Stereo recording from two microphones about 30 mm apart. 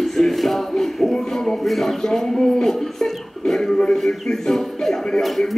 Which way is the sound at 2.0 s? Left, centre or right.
Centre.